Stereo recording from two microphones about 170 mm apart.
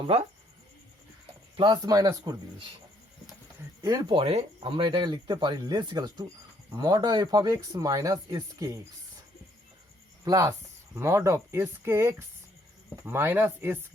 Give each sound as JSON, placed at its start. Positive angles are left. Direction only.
{"t": 0.0, "sound": "speech", "side_deg": -35}
{"t": 1.5, "sound": "speech", "side_deg": -25}
{"t": 3.8, "sound": "speech", "side_deg": -25}
{"t": 10.2, "sound": "speech", "side_deg": -20}